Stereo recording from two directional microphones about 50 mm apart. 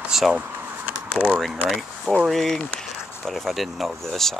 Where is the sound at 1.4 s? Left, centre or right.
Centre.